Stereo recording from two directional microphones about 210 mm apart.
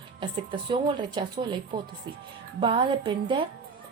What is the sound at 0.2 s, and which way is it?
Speech, 25° right (ahead or behind).